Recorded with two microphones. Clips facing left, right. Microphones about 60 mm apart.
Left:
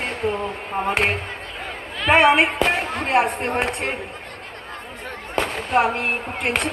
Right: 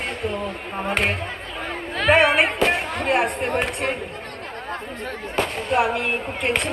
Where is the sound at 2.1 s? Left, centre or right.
Centre.